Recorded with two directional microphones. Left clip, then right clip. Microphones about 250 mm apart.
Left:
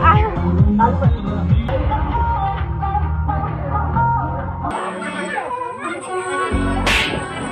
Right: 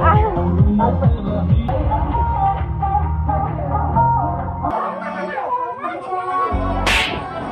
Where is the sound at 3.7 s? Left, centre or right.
Left.